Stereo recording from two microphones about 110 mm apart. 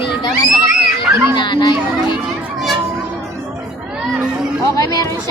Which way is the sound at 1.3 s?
45° left (ahead or behind).